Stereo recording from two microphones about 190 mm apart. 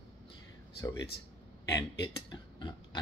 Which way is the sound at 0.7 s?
20° left (ahead or behind).